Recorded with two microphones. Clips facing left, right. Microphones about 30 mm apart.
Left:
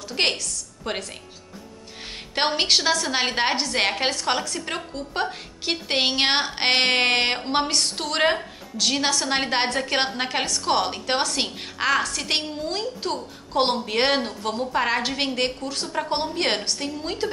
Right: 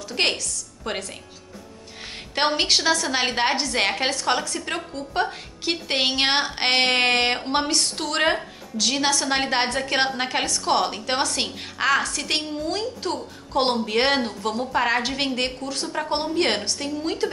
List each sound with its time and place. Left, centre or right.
0.1 s a woman's voice: centre
2.3 s a woman's voice: centre